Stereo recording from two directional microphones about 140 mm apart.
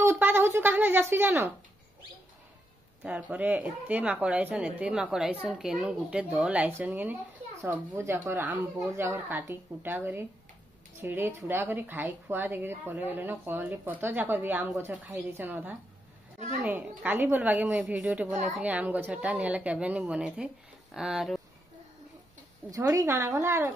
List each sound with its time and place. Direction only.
0.0 s speech: 15° right (ahead or behind)
3.0 s speech: 10° right (ahead or behind)
22.7 s speech: 25° right (ahead or behind)